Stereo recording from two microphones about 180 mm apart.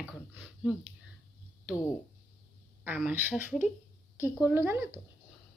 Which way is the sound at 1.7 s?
15° left (ahead or behind).